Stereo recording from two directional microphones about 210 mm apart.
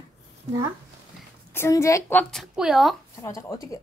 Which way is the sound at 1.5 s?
15° left (ahead or behind).